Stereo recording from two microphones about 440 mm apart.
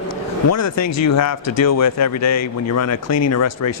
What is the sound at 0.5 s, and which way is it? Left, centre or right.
Speech, left.